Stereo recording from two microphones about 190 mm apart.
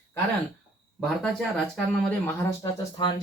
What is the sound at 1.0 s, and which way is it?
Speech, centre (ahead or behind).